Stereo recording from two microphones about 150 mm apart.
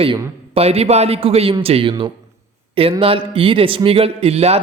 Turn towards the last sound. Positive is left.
turn(degrees=-45)  # may be behind; listen again after turning